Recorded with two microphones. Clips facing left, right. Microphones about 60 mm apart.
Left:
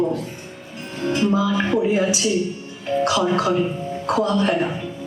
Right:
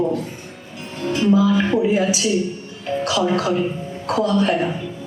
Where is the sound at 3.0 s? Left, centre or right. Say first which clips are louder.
Even; left.